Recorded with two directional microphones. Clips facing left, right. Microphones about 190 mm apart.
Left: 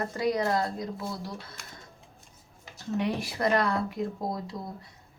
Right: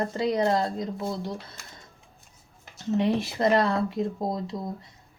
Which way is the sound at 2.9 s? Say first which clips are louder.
Right 5 dB; 25° right (ahead or behind).